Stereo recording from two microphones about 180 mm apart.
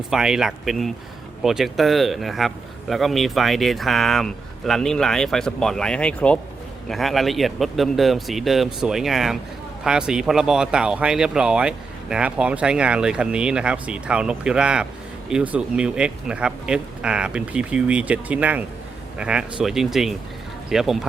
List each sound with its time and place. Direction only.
0.1 s speech: 5° right (ahead or behind)